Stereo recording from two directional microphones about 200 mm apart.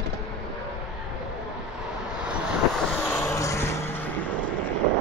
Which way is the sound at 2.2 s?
5° right (ahead or behind).